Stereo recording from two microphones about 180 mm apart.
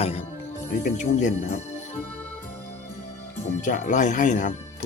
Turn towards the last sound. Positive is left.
turn(degrees=45)  # may be behind; listen again after turning